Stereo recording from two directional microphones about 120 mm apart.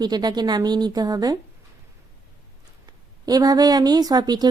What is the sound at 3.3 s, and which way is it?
Speech, 30° right (ahead or behind).